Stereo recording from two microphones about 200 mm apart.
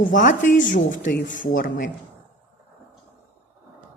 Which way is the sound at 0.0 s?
40° left (ahead or behind).